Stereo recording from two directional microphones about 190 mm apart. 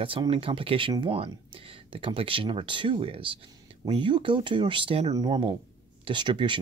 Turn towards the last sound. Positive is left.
turn(degrees=-25)  # may be behind; listen again after turning